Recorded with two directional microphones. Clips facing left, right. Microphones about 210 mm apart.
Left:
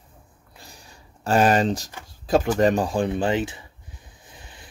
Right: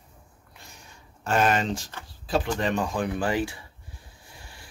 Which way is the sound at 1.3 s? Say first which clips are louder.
Left 5 dB; 35° left (ahead or behind).